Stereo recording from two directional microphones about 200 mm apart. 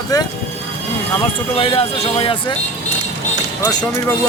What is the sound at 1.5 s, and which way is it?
Speech, 30° left (ahead or behind).